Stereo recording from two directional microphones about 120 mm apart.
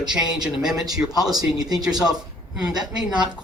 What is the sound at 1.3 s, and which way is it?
Speech, 35° right (ahead or behind).